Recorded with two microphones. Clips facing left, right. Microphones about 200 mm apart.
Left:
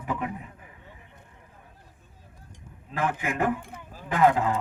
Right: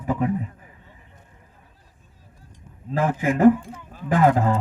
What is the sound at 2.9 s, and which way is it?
Speech, 40° right (ahead or behind).